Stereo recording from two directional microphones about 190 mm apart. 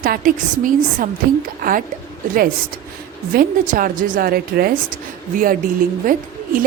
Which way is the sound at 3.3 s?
50° right (ahead or behind).